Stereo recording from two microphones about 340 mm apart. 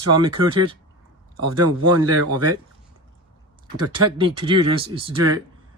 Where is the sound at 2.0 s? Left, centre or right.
Right.